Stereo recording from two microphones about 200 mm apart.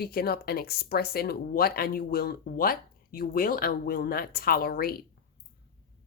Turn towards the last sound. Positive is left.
turn(degrees=50)  # may be behind; listen again after turning